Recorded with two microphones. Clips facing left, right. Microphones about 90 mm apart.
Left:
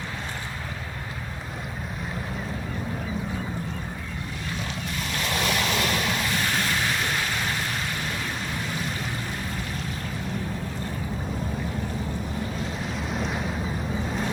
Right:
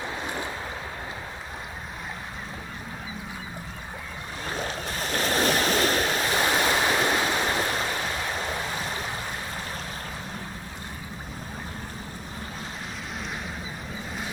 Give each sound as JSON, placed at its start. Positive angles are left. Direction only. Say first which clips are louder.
{"t": 4.5, "sound": "waves", "louder": "right 2 dB", "side_deg": -40}